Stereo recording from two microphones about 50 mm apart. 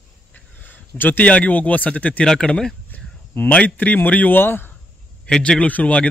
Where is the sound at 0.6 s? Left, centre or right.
Left.